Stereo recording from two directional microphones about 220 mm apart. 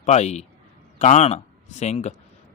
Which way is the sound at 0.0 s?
30° left (ahead or behind).